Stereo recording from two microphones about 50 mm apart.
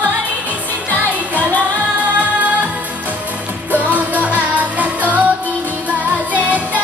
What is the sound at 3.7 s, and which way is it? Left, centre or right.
Music, right.